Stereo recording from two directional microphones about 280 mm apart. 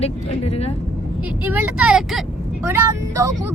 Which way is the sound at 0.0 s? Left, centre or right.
Left.